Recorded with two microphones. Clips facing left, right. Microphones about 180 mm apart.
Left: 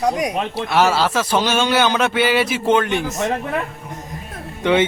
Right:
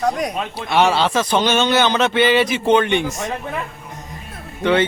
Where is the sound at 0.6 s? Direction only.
5° left (ahead or behind).